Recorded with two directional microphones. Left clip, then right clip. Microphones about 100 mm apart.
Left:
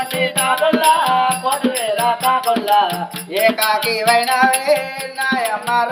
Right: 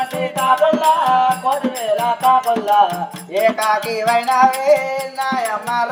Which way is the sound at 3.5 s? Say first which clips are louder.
Even; 45° right (ahead or behind).